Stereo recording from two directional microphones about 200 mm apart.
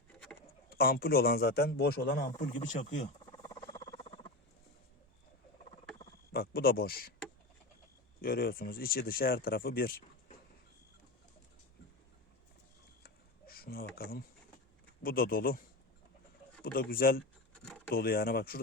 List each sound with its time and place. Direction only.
0.1 s a sound: 5° left (ahead or behind)
0.7 s a man's voice: 50° left (ahead or behind)
3.2 s rodents: 15° left (ahead or behind)
4.0 s frog: 25° left (ahead or behind)
6.0 s a sound: 50° left (ahead or behind)
8.2 s a man's voice: 50° left (ahead or behind)
13.5 s a man's voice: 50° left (ahead or behind)
16.7 s a man's voice: 45° left (ahead or behind)
17.6 s a sound: 5° left (ahead or behind)
17.9 s a man's voice: 50° left (ahead or behind)